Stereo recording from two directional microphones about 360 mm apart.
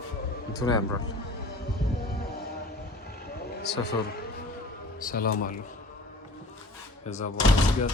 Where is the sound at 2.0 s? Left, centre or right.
Left.